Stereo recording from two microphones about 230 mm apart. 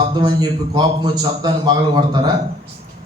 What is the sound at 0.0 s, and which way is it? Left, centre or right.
A man's voice, centre.